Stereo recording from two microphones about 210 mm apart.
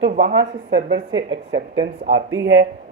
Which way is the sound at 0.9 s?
60° right (ahead or behind).